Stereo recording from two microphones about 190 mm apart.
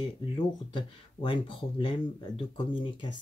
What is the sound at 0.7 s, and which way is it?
Speech, 25° left (ahead or behind).